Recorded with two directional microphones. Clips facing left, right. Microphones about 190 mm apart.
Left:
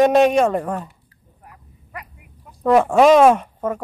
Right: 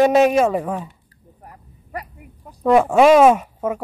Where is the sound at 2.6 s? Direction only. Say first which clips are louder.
Even; centre (ahead or behind).